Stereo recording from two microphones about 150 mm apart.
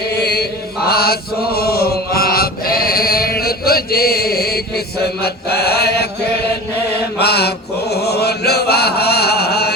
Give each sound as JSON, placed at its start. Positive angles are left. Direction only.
{"t": 0.2, "sound": "chant", "side_deg": 90}